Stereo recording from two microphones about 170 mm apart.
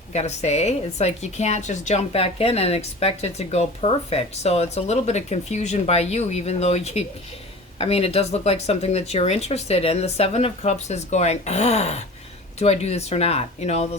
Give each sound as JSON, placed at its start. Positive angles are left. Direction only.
{"t": 0.1, "sound": "a woman's voice", "side_deg": 40}